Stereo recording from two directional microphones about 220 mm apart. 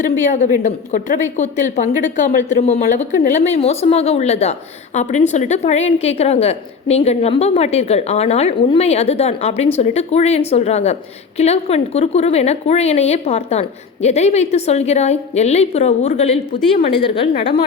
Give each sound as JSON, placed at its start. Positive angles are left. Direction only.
{"t": 0.0, "sound": "a woman's voice", "side_deg": 35}